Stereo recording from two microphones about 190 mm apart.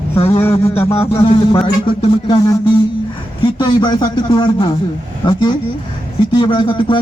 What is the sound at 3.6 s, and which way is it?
Speech, 25° left (ahead or behind).